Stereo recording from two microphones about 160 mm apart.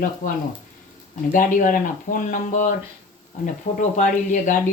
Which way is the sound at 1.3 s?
55° left (ahead or behind).